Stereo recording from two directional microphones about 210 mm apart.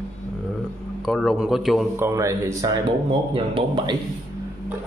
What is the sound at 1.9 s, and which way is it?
A man's voice, 15° right (ahead or behind).